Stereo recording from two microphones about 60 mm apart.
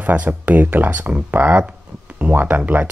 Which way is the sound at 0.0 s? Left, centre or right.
Right.